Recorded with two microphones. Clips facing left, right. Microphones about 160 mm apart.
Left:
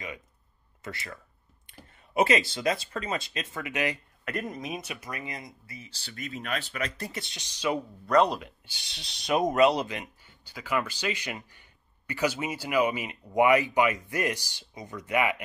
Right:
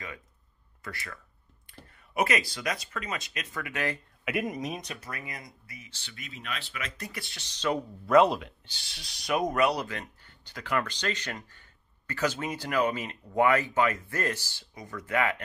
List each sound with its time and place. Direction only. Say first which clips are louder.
0.8 s speech: left 2 dB; 25° left (ahead or behind)
4.2 s speech: right 4 dB; 5° right (ahead or behind)
5.1 s speech: left 3 dB; 20° left (ahead or behind); by 7.1 s 40° left (ahead or behind)
7.1 s speech: left 3 dB; 20° left (ahead or behind)
8.1 s speech: right 2 dB; centre (ahead or behind)
8.7 s speech: left 2 dB; 20° left (ahead or behind)
10.2 s speech: even; 5° left (ahead or behind)